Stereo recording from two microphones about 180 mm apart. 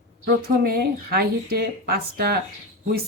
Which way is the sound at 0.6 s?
60° right (ahead or behind).